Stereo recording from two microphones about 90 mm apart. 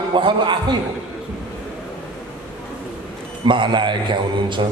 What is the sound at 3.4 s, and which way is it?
A man's voice, 65° right (ahead or behind).